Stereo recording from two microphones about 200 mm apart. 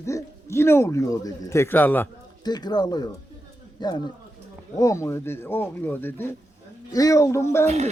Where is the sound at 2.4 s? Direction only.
20° left (ahead or behind).